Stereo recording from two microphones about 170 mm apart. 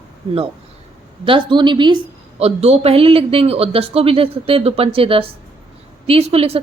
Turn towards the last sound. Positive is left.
turn(degrees=-35)  # may be behind; listen again after turning